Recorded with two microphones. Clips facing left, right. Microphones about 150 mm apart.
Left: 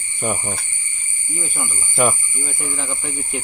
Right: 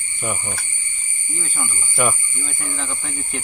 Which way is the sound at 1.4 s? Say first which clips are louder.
Left 2 dB; 15° left (ahead or behind).